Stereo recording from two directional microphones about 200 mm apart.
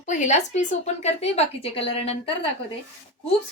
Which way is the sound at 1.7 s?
30° left (ahead or behind).